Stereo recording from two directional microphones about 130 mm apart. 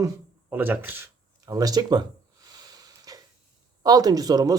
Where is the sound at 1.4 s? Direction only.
30° right (ahead or behind).